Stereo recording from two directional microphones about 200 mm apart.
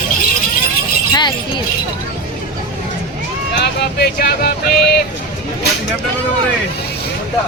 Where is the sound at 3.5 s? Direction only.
55° left (ahead or behind).